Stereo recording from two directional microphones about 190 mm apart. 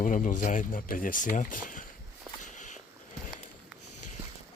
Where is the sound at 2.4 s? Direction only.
40° left (ahead or behind).